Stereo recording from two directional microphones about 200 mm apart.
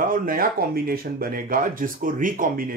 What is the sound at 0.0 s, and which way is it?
Speech, 45° right (ahead or behind).